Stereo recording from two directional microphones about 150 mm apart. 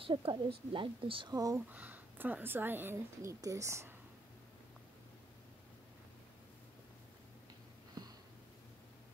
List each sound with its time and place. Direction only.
0.0 s a woman's voice: 35° right (ahead or behind)
1.7 s a woman's voice: 10° right (ahead or behind)
8.0 s sniff: 30° right (ahead or behind)